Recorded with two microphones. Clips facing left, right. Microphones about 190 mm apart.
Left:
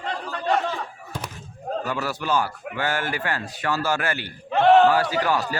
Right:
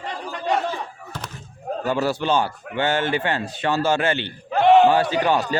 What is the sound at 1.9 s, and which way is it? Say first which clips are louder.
A man's voice: right 6 dB; 30° right (ahead or behind).